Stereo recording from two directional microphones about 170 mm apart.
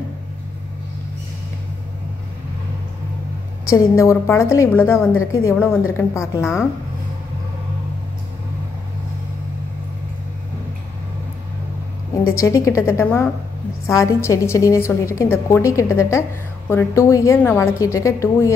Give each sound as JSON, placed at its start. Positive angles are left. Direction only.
{"t": 3.6, "sound": "a woman's voice", "side_deg": 20}
{"t": 12.4, "sound": "a woman's voice", "side_deg": 15}